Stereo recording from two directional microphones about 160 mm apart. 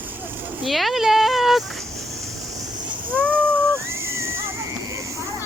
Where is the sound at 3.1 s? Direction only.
10° left (ahead or behind).